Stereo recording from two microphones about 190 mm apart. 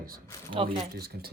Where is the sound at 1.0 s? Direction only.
55° right (ahead or behind).